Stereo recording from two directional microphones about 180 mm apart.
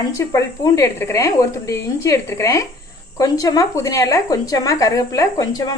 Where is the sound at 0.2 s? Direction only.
15° left (ahead or behind).